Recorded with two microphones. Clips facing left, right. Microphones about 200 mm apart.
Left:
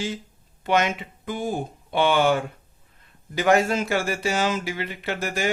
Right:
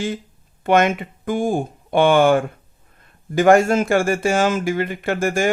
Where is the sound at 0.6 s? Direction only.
50° right (ahead or behind).